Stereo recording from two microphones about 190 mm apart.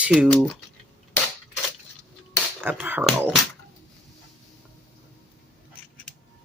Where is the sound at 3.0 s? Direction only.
Centre (ahead or behind).